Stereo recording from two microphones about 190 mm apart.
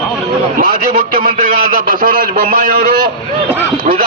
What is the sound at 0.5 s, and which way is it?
A man's voice, 45° right (ahead or behind).